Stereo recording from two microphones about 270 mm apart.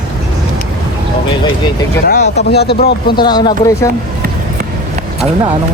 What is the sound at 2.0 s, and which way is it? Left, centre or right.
Speech, left.